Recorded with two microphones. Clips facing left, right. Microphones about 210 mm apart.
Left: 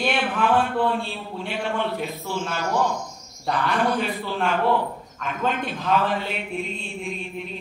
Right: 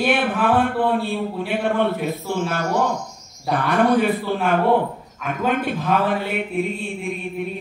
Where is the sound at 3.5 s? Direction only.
55° right (ahead or behind).